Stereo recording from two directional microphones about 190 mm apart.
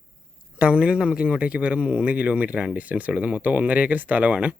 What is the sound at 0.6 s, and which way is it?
Speech, 5° right (ahead or behind).